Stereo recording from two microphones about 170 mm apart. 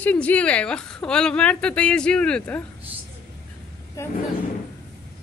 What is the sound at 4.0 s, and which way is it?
Speech, 20° left (ahead or behind).